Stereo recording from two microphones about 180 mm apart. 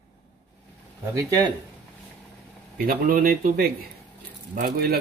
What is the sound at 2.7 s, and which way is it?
Speech, 50° right (ahead or behind).